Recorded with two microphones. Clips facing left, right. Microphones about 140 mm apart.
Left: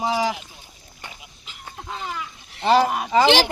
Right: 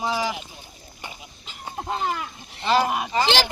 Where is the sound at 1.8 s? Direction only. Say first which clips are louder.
Right 5 dB; 55° right (ahead or behind).